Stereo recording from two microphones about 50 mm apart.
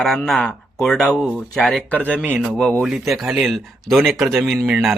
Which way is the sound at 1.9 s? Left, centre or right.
Left.